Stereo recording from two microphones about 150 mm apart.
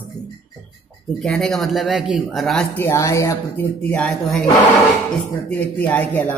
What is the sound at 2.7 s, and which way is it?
Speech, 20° left (ahead or behind).